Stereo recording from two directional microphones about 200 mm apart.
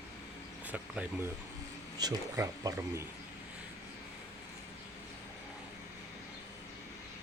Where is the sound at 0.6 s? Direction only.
10° right (ahead or behind).